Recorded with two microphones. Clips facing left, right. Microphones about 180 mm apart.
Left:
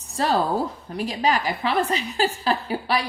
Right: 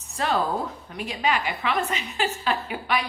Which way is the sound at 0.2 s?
35° left (ahead or behind).